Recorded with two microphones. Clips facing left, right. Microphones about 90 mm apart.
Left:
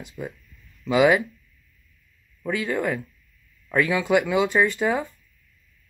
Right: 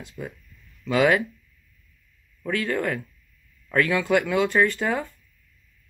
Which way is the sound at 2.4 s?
10° left (ahead or behind).